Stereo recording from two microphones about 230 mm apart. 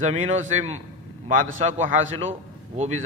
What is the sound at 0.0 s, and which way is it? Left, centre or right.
A man's voice, right.